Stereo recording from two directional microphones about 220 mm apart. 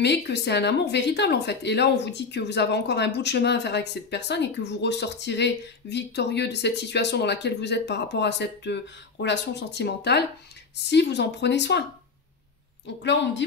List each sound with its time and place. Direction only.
0.0 s speech: 50° left (ahead or behind)
12.8 s a woman's voice: 55° left (ahead or behind)